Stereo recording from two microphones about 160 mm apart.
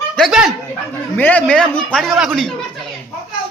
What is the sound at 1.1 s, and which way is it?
A man's voice, 10° left (ahead or behind).